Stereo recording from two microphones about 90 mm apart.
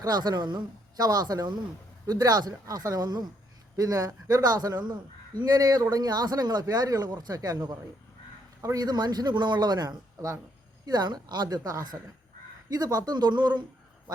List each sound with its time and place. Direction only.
0.0 s speech: 45° right (ahead or behind)